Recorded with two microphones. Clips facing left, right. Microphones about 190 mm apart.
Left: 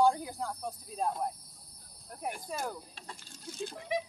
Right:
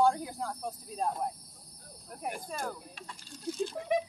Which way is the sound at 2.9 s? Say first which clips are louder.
Right 1 dB; 35° left (ahead or behind).